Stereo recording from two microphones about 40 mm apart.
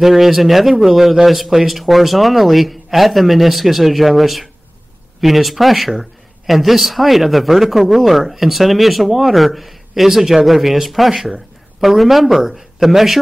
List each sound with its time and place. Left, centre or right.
0.0 s speech: centre